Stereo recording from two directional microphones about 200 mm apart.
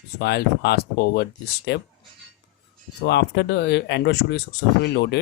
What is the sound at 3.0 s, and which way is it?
Speech, 55° left (ahead or behind).